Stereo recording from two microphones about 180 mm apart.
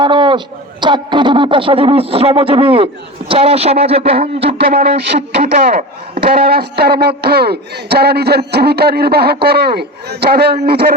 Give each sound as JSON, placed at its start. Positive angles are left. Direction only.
{"t": 0.0, "sound": "a man's voice", "side_deg": -25}
{"t": 4.6, "sound": "speech", "side_deg": -60}